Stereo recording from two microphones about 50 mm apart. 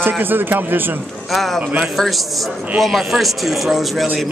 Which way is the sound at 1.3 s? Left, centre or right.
Centre.